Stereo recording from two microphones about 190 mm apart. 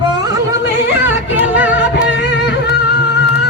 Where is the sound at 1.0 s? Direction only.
10° right (ahead or behind).